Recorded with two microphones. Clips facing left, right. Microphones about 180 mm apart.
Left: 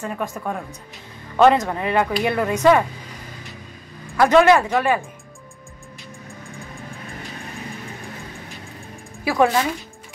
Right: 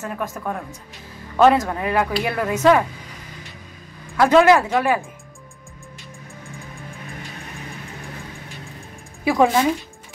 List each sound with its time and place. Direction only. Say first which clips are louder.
0.0 s speech: left 1 dB; centre (ahead or behind)
4.2 s speech: even; 5° right (ahead or behind)
9.2 s speech: right 1 dB; 15° right (ahead or behind)